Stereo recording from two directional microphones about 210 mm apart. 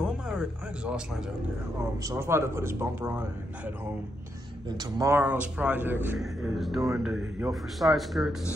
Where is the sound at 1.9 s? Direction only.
15° right (ahead or behind).